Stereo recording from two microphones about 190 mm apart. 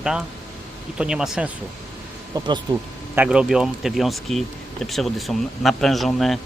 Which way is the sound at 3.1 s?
5° right (ahead or behind).